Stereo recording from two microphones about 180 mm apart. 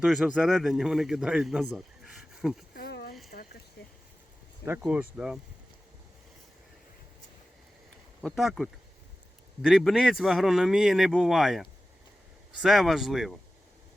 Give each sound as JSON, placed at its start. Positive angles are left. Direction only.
{"t": 0.0, "sound": "speech", "side_deg": -5}
{"t": 2.7, "sound": "a sound", "side_deg": 60}
{"t": 4.6, "sound": "speech", "side_deg": -15}
{"t": 8.2, "sound": "speech", "side_deg": 0}